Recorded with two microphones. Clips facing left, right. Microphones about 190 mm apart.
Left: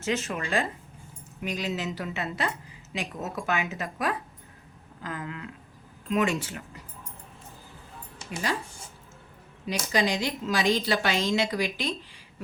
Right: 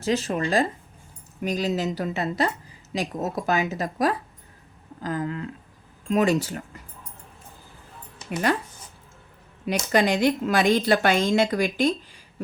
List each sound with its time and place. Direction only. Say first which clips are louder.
0.0 s speech: right 5 dB; 35° right (ahead or behind)
9.6 s a woman's voice: right 5 dB; 55° right (ahead or behind)